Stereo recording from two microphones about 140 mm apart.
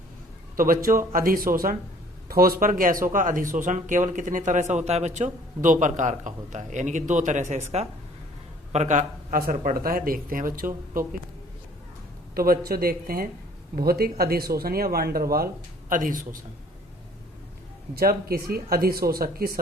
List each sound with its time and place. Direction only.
0.5 s speech: 85° right; by 7.6 s 60° right (ahead or behind)
8.7 s speech: 55° right (ahead or behind); by 10.7 s 85° right
12.3 s speech: 90° right
15.9 s speech: 75° right (ahead or behind)
17.9 s speech: 90° right